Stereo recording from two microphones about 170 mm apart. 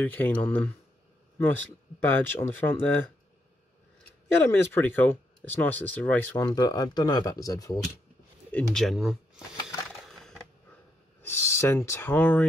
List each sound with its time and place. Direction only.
0.0 s speech: 10° left (ahead or behind)
2.0 s speech: 10° left (ahead or behind)
4.4 s speech: 15° left (ahead or behind)
6.4 s speech: 20° left (ahead or behind)
8.5 s speech: 5° left (ahead or behind)
9.8 s a sound: 5° left (ahead or behind)
11.2 s speech: 15° left (ahead or behind)